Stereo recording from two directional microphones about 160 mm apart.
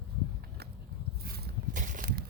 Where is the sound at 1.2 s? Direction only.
75° right (ahead or behind); by 2.2 s 55° right (ahead or behind).